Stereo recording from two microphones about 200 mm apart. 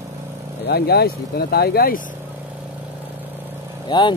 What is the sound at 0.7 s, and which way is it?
Speech, 50° left (ahead or behind).